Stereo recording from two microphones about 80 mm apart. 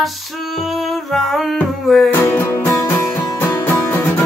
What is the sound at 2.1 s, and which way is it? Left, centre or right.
Music, left.